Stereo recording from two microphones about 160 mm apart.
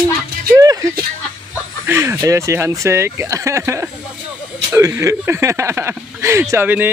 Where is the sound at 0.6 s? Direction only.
20° right (ahead or behind).